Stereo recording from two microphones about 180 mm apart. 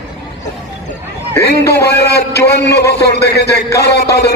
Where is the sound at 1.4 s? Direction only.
65° left (ahead or behind).